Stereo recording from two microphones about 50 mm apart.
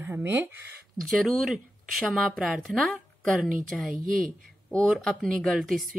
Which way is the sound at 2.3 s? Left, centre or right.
Centre.